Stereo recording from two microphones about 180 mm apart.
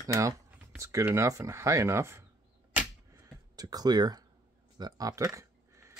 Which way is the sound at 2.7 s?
15° right (ahead or behind).